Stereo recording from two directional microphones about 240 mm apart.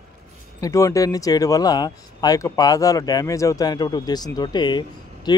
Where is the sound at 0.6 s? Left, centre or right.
Centre.